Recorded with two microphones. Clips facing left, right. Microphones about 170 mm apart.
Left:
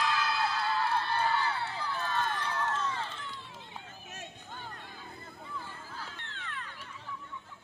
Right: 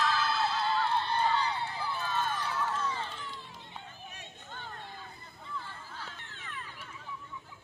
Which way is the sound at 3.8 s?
45° left (ahead or behind).